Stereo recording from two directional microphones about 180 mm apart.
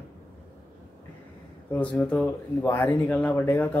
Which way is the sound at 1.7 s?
10° left (ahead or behind).